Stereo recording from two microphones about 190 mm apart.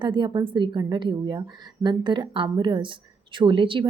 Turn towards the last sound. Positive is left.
turn(degrees=-25)  # may be behind; listen again after turning